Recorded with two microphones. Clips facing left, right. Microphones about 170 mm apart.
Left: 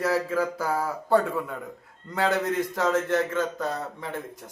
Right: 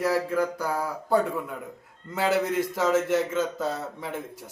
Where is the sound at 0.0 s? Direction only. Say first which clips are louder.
Even; centre (ahead or behind).